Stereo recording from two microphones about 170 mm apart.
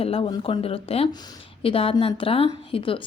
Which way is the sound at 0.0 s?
35° left (ahead or behind).